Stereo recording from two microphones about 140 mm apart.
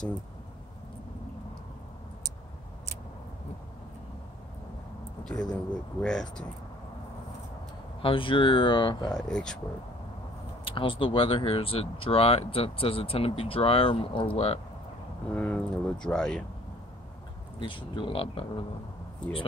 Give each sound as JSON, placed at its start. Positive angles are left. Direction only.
{"t": 5.2, "sound": "speech", "side_deg": 5}
{"t": 8.0, "sound": "speech", "side_deg": 40}
{"t": 9.1, "sound": "speech", "side_deg": 5}
{"t": 10.7, "sound": "speech", "side_deg": 40}
{"t": 15.3, "sound": "speech", "side_deg": 10}
{"t": 17.6, "sound": "speech", "side_deg": 35}